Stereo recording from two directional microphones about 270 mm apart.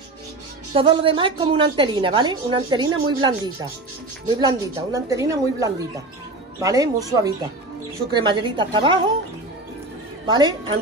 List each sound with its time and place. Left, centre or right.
0.7 s a woman's voice: centre
8.1 s a woman's voice: centre
10.2 s a woman's voice: centre